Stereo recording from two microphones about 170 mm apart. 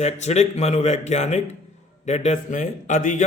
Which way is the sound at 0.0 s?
40° left (ahead or behind).